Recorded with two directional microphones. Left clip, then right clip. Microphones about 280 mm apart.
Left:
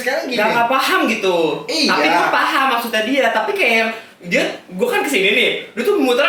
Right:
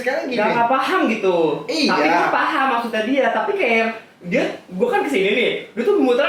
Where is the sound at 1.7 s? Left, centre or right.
Centre.